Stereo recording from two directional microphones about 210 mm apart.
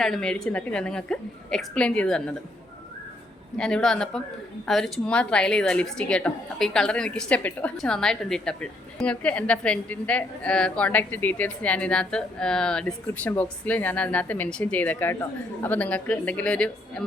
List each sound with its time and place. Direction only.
0.0 s a woman's voice: 5° left (ahead or behind)
3.6 s a woman's voice: 5° left (ahead or behind)